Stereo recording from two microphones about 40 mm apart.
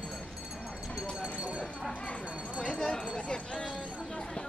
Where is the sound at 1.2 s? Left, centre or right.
Right.